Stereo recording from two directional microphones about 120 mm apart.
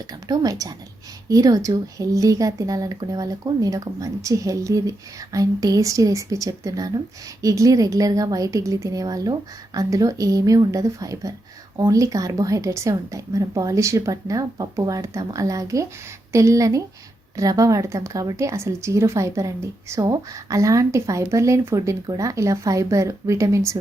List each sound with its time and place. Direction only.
0.1 s speech: 30° right (ahead or behind)